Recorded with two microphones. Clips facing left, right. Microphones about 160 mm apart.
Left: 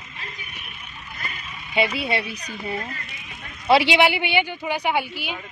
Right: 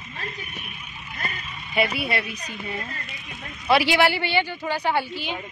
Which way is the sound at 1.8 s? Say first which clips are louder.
Left 1 dB; 25° left (ahead or behind).